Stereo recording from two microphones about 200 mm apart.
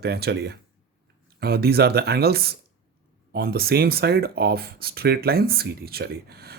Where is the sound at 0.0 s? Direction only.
55° right (ahead or behind).